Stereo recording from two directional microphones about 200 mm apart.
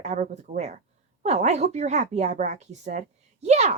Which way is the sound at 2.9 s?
35° right (ahead or behind).